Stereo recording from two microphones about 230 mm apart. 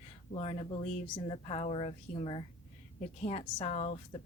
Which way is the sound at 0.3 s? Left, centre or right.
Left.